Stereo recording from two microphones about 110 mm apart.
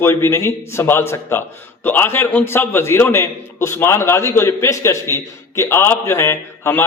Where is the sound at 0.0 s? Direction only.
25° left (ahead or behind).